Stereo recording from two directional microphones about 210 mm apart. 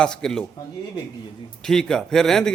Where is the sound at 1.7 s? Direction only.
5° left (ahead or behind).